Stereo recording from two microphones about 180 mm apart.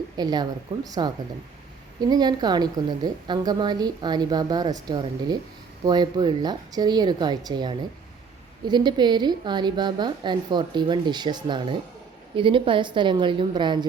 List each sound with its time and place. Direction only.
0.2 s a woman's voice: 25° right (ahead or behind)